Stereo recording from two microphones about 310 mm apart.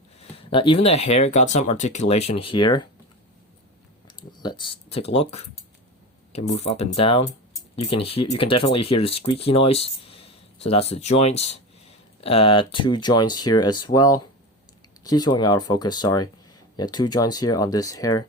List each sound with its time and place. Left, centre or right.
0.2 s speech: centre
4.2 s speech: centre